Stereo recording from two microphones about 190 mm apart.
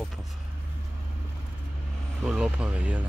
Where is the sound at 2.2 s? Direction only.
5° right (ahead or behind).